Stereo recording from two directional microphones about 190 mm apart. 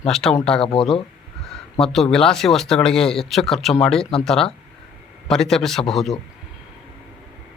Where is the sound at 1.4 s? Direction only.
Centre (ahead or behind).